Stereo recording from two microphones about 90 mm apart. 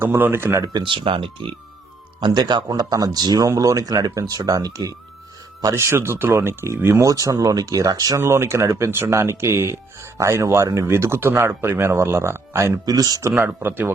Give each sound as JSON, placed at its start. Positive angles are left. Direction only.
{"t": 0.0, "sound": "speech", "side_deg": -25}
{"t": 0.8, "sound": "speech", "side_deg": -65}
{"t": 2.2, "sound": "speech", "side_deg": -55}
{"t": 5.7, "sound": "speech", "side_deg": -30}
{"t": 7.0, "sound": "speech", "side_deg": -40}
{"t": 8.2, "sound": "speech", "side_deg": -30}
{"t": 12.8, "sound": "speech", "side_deg": -45}
{"t": 13.6, "sound": "speech", "side_deg": -25}